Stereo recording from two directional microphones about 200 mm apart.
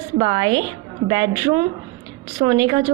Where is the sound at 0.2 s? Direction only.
25° right (ahead or behind).